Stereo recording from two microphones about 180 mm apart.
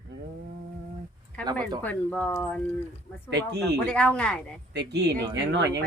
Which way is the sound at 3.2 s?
70° right (ahead or behind).